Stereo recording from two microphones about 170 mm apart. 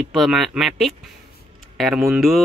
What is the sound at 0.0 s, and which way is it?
Speech, centre (ahead or behind).